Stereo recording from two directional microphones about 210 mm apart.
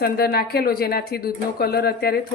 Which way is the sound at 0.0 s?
45° left (ahead or behind).